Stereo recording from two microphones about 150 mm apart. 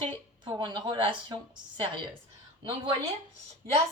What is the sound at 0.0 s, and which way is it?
A woman's voice, 30° right (ahead or behind).